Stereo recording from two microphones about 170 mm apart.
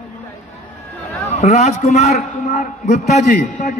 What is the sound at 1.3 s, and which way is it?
A man's voice, 40° left (ahead or behind).